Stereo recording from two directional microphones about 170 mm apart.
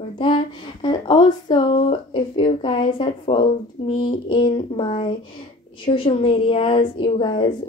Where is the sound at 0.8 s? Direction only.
30° left (ahead or behind).